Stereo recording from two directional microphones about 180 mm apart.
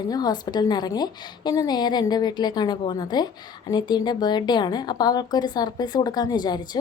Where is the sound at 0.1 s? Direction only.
20° left (ahead or behind).